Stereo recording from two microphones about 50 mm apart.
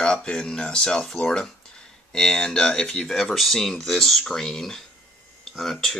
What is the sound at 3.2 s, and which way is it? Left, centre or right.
Speech, centre.